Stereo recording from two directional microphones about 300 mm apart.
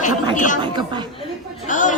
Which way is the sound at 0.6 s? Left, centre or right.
Centre.